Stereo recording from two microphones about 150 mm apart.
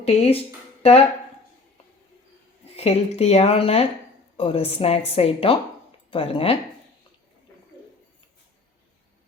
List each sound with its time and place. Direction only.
0.0 s speech: 40° left (ahead or behind)
2.7 s a woman's voice: 45° left (ahead or behind)